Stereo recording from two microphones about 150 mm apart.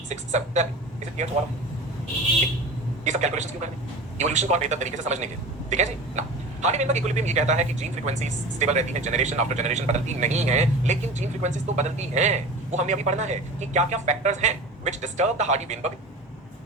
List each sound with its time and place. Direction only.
0.1 s a man's voice: 50° right (ahead or behind)
3.0 s a man's voice: 50° right (ahead or behind)